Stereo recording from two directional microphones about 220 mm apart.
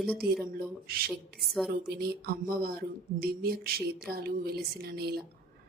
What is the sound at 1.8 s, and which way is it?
Speech, 45° right (ahead or behind).